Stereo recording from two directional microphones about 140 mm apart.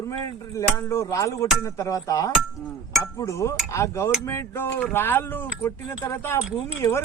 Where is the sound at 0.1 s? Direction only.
20° left (ahead or behind).